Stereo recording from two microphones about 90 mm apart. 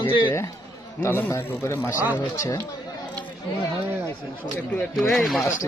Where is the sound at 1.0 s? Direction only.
30° left (ahead or behind).